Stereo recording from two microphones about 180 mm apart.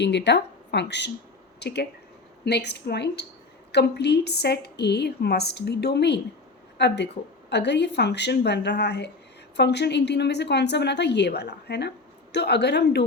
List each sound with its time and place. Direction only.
0.0 s a woman's voice: 70° left (ahead or behind)